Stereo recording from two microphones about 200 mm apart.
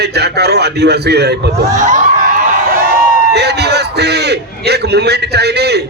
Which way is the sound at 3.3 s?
55° right (ahead or behind).